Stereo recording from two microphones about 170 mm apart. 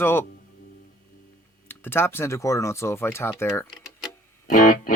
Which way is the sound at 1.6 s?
15° left (ahead or behind).